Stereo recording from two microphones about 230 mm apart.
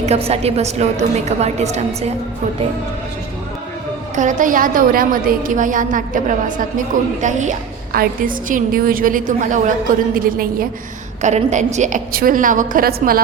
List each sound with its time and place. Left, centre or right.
0.0 s a woman's voice: right
4.1 s a woman's voice: right